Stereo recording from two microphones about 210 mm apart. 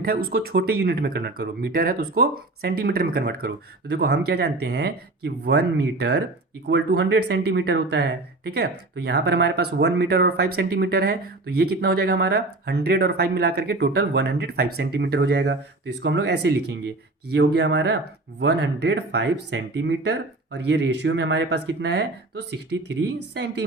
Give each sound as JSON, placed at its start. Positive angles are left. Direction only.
{"t": 0.3, "sound": "speech", "side_deg": -45}